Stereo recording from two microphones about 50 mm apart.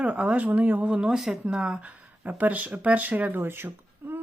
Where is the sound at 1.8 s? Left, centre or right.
Right.